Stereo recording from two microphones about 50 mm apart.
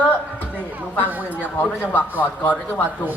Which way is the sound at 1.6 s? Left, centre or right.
Left.